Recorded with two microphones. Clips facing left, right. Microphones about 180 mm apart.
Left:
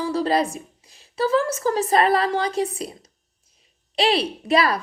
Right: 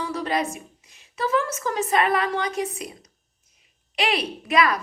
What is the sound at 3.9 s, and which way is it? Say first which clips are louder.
Speech: left 4 dB; 30° left (ahead or behind).